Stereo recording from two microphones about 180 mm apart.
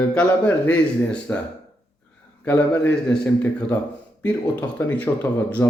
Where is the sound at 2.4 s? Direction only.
10° left (ahead or behind).